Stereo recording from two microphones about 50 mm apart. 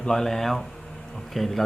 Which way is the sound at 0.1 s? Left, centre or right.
Centre.